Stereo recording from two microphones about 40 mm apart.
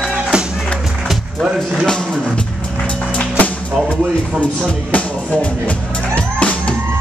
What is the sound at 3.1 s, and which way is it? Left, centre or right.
Music, left.